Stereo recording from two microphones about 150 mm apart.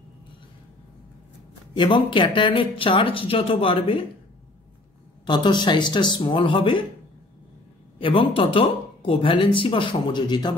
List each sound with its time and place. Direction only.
1.8 s speech: 35° left (ahead or behind)
5.2 s speech: 30° left (ahead or behind)
8.0 s speech: 35° left (ahead or behind)